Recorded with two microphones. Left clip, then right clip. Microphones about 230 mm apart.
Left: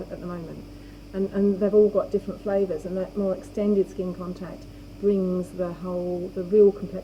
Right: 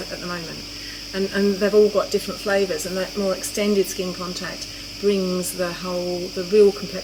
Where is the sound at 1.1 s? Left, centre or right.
Centre.